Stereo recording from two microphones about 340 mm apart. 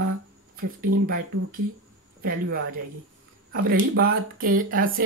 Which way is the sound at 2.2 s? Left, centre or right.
Right.